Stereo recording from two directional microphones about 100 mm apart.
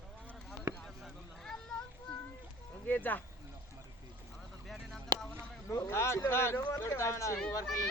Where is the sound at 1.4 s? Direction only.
5° left (ahead or behind).